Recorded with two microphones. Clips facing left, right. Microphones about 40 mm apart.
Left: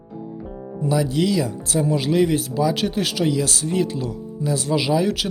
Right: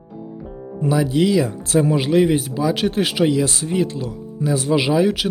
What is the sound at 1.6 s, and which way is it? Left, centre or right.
Speech, right.